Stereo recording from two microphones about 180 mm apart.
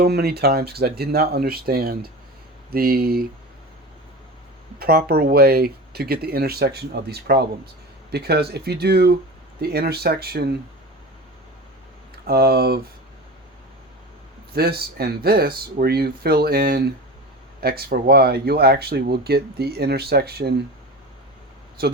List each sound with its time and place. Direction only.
0.0 s speech: 60° right (ahead or behind)
4.8 s speech: 60° right (ahead or behind)
12.2 s speech: 60° right (ahead or behind)
14.5 s speech: 60° right (ahead or behind)